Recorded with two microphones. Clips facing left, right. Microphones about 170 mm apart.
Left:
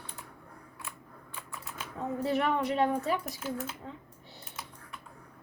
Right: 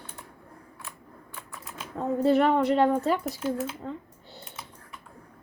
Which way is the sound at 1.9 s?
60° right (ahead or behind).